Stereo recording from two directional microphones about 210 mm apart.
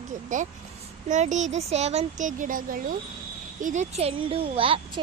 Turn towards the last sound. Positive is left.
turn(degrees=-25)  # may be behind; listen again after turning